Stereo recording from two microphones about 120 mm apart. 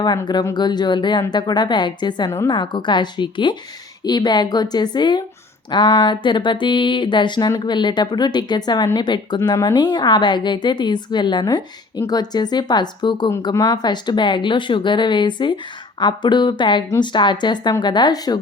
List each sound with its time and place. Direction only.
0.5 s a woman's voice: 35° left (ahead or behind)